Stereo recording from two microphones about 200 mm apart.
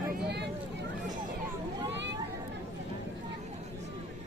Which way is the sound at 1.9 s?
60° right (ahead or behind).